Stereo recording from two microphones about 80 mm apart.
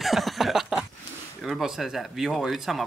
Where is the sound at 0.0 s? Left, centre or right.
Centre.